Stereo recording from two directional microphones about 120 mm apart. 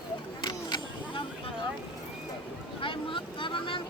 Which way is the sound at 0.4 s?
40° left (ahead or behind).